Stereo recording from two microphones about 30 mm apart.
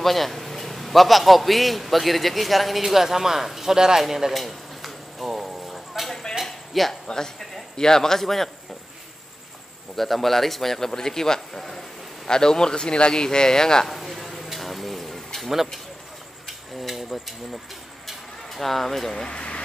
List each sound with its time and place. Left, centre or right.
0.0 s a man's voice: centre
4.3 s a sound: centre
6.4 s cricket: centre
6.9 s a man's voice: centre
9.9 s a man's voice: centre; by 13.8 s left
13.8 s a sound: centre
16.4 s insect: centre
18.0 s a sound: centre
19.2 s speech: left